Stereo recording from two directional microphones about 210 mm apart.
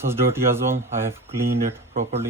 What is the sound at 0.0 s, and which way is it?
Speech, 10° right (ahead or behind).